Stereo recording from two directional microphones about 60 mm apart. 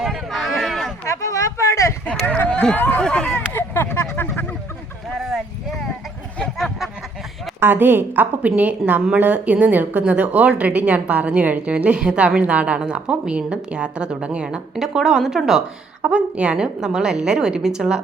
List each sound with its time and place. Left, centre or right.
0.1 s a sound: centre
1.0 s speech: left
2.0 s speech: left
3.0 s speech: centre
3.5 s a sound: left
5.2 s clip-clop: centre
6.4 s a sound: centre
7.6 s a woman's voice: right; by 15.6 s centre
16.0 s a woman's voice: right